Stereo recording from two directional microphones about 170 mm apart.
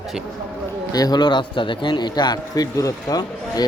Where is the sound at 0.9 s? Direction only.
25° left (ahead or behind).